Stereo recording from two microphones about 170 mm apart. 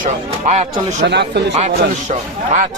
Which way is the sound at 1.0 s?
85° right.